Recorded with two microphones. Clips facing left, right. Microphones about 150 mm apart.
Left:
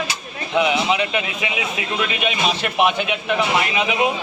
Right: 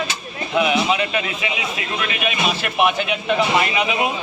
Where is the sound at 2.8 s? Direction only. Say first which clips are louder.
Even; 20° left (ahead or behind).